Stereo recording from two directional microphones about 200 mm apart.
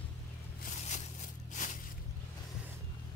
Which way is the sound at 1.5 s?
40° left (ahead or behind).